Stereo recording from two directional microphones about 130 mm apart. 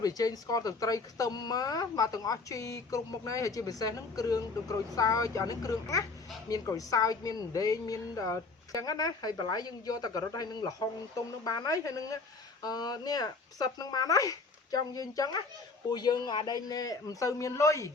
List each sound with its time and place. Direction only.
0.0 s speech: 30° left (ahead or behind)